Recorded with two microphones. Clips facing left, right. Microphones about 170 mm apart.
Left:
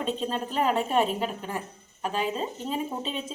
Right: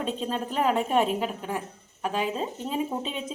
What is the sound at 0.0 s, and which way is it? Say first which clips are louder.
Speech: even; 5° right (ahead or behind).